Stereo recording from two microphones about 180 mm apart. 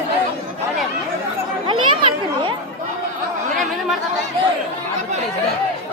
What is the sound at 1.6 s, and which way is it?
Children playing, 25° right (ahead or behind).